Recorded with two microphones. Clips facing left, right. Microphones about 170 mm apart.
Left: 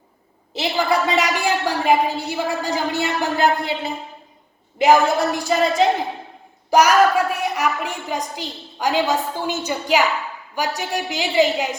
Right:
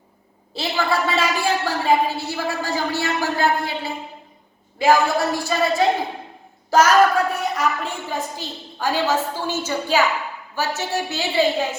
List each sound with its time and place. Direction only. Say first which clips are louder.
0.5 s a woman's voice: left 2 dB; 20° left (ahead or behind)